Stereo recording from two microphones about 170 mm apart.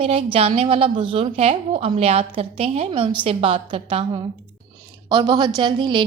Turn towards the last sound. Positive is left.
turn(degrees=-30)  # may be behind; listen again after turning